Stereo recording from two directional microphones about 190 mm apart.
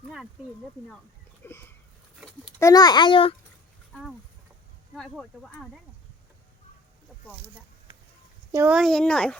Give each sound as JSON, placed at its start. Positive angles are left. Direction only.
{"t": 1.5, "sound": "sniff", "side_deg": 10}
{"t": 2.6, "sound": "a child's voice", "side_deg": 20}
{"t": 4.9, "sound": "speech", "side_deg": 0}
{"t": 8.5, "sound": "speech", "side_deg": -10}
{"t": 8.8, "sound": "speech", "side_deg": 5}